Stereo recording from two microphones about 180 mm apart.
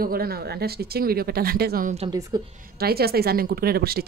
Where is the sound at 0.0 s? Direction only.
55° right (ahead or behind).